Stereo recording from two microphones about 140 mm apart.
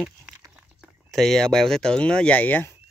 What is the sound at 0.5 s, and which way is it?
Speech, 5° right (ahead or behind).